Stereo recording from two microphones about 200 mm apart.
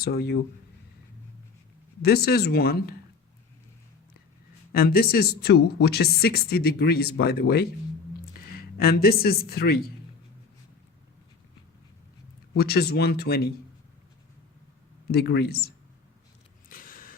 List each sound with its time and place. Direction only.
0.0 s speech: 50° left (ahead or behind)
2.0 s speech: 50° left (ahead or behind)
4.7 s speech: 50° left (ahead or behind)
12.5 s speech: 50° left (ahead or behind)
15.1 s speech: 55° left (ahead or behind)
16.6 s a sound: 45° left (ahead or behind)